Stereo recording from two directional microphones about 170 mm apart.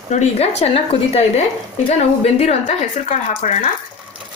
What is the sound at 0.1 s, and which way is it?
A woman's voice, 40° left (ahead or behind).